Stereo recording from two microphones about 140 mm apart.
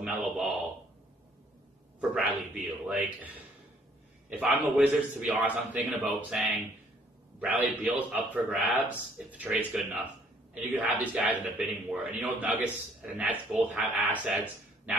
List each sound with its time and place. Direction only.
0.0 s a man's voice: centre (ahead or behind)
2.0 s a man's voice: 10° right (ahead or behind)
4.3 s a man's voice: 15° right (ahead or behind)